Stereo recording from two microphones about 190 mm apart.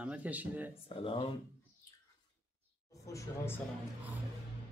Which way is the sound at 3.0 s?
15° left (ahead or behind).